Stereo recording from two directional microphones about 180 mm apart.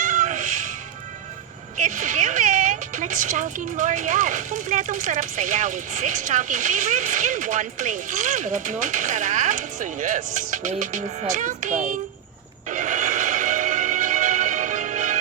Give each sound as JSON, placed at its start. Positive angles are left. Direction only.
{"t": 0.0, "sound": "music", "side_deg": -45}
{"t": 1.7, "sound": "speech", "side_deg": -45}
{"t": 12.6, "sound": "music", "side_deg": -45}